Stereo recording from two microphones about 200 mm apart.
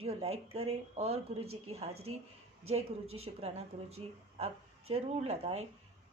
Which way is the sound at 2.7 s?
30° right (ahead or behind).